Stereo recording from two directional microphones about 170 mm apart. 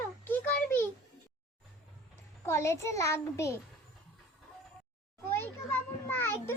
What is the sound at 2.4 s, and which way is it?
A child's voice, 15° left (ahead or behind).